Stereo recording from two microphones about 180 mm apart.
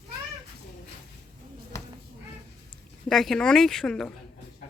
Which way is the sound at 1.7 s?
15° left (ahead or behind).